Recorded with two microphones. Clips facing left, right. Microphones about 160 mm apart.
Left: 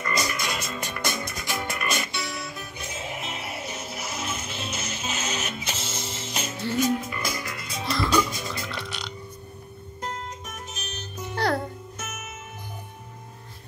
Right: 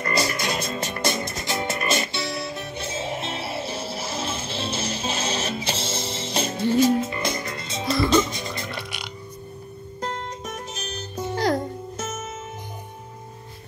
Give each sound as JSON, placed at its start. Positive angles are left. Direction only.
{"t": 0.0, "sound": "frog", "side_deg": -35}
{"t": 6.8, "sound": "music", "side_deg": -25}
{"t": 7.9, "sound": "burping", "side_deg": -25}
{"t": 10.0, "sound": "music", "side_deg": -35}
{"t": 11.3, "sound": "music", "side_deg": -15}
{"t": 12.0, "sound": "music", "side_deg": -30}